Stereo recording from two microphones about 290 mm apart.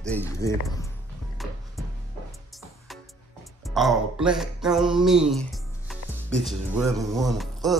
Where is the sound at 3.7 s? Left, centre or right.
Centre.